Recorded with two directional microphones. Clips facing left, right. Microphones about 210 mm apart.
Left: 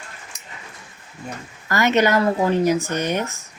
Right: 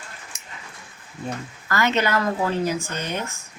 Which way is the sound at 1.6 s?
20° left (ahead or behind).